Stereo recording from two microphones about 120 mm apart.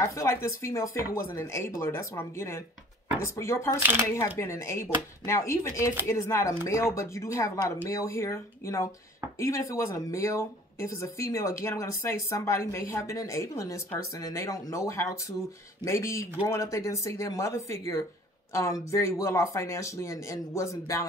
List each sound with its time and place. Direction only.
0.1 s speech: 25° left (ahead or behind)